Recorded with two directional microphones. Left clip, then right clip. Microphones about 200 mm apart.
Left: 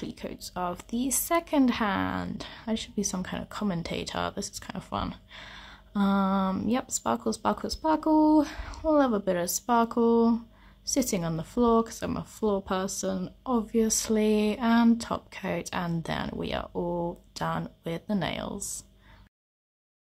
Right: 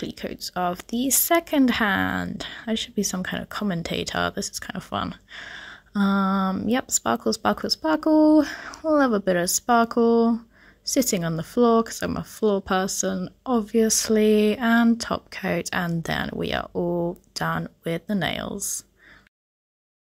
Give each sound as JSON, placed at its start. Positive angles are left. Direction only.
{"t": 0.0, "sound": "a woman's voice", "side_deg": -15}